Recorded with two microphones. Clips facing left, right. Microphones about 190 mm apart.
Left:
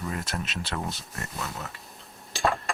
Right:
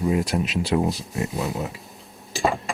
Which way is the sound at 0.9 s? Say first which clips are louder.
Right 11 dB; centre (ahead or behind).